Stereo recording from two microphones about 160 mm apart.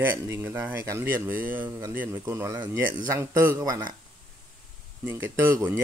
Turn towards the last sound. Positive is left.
turn(degrees=-15)  # may be behind; listen again after turning